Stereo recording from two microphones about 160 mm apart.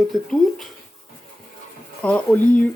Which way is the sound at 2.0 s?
5° left (ahead or behind).